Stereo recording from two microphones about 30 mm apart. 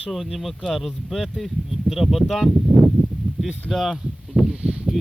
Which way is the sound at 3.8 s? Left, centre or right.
Centre.